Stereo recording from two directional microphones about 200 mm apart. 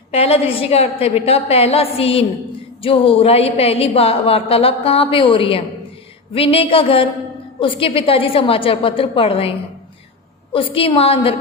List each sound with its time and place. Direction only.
0.1 s a woman's voice: 30° left (ahead or behind)